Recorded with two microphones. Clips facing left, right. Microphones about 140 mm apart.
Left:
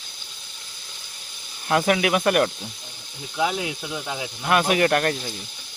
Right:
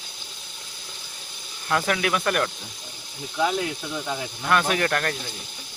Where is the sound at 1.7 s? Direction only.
20° left (ahead or behind).